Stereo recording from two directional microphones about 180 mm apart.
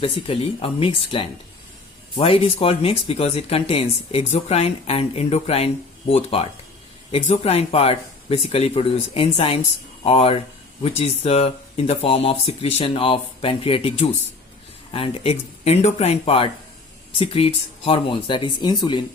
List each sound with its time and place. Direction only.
0.0 s speech: 30° left (ahead or behind)